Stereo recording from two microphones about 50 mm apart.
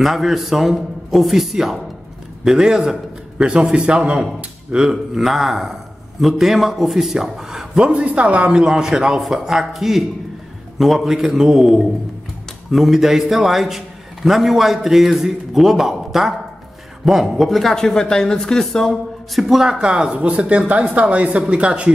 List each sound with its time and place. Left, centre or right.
0.0 s a man's voice: centre
4.8 s a man's voice: centre
7.9 s a man's voice: right; by 19.4 s centre
19.4 s speech: centre